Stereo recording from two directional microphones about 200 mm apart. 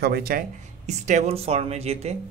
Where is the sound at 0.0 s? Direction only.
50° right (ahead or behind).